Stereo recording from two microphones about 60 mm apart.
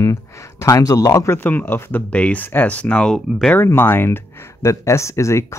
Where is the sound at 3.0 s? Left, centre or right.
Centre.